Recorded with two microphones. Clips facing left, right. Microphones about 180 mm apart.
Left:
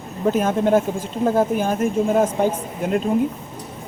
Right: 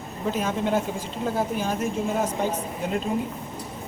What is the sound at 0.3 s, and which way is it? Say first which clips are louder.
Speech: left 7 dB; 50° left (ahead or behind).